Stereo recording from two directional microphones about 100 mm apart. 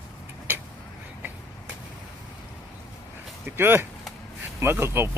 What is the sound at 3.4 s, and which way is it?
Speech, 25° right (ahead or behind).